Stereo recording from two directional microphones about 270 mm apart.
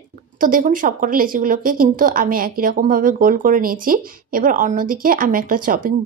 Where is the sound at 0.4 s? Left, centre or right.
Right.